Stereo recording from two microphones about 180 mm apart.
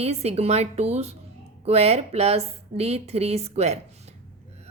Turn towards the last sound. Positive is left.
turn(degrees=-35)  # may be behind; listen again after turning